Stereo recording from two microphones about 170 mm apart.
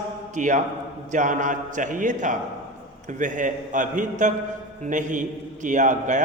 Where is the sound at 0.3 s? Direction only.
45° right (ahead or behind).